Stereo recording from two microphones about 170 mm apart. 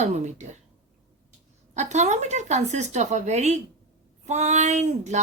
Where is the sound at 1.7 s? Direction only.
45° right (ahead or behind).